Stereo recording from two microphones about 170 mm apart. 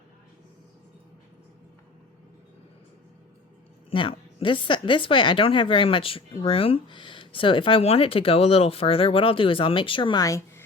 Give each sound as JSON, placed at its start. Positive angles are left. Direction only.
{"t": 3.8, "sound": "speech", "side_deg": 30}